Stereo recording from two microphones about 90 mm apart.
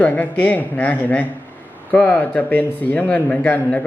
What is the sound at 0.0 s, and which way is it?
Speech, 15° left (ahead or behind).